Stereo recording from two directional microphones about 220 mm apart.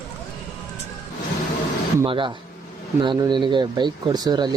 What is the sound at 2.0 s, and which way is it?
Speech, 20° right (ahead or behind).